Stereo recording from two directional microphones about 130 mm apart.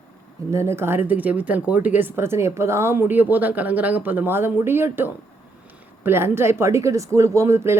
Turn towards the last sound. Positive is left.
turn(degrees=-20)  # may be behind; listen again after turning